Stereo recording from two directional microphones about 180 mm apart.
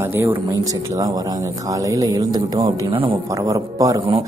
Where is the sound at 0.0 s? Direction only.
15° right (ahead or behind).